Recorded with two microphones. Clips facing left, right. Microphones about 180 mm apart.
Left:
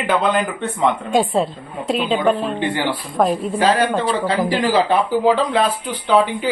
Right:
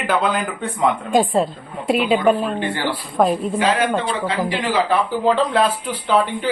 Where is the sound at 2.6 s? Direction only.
15° left (ahead or behind).